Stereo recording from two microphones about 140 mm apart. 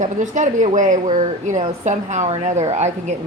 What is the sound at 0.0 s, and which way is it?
A woman's voice, 60° right (ahead or behind).